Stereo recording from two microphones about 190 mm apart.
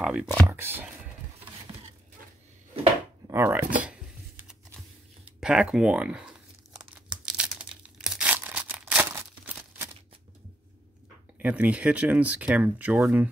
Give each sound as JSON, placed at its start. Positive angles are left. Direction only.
{"t": 0.0, "sound": "speech", "side_deg": -5}
{"t": 1.4, "sound": "a sound", "side_deg": -30}
{"t": 3.3, "sound": "speech", "side_deg": -15}
{"t": 5.4, "sound": "speech", "side_deg": -5}
{"t": 6.7, "sound": "tearing", "side_deg": -5}
{"t": 11.3, "sound": "speech", "side_deg": -10}